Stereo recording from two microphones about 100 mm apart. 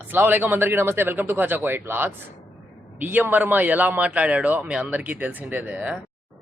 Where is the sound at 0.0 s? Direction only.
20° right (ahead or behind).